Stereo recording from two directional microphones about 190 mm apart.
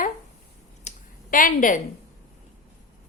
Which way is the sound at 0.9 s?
45° left (ahead or behind).